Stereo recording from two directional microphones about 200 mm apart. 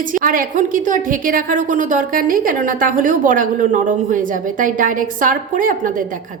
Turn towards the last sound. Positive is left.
turn(degrees=-40)  # may be behind; listen again after turning